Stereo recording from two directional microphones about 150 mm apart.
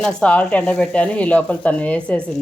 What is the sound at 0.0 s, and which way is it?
Speech, 5° left (ahead or behind).